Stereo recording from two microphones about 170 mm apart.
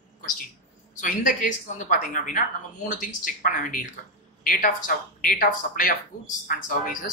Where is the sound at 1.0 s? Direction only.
50° left (ahead or behind).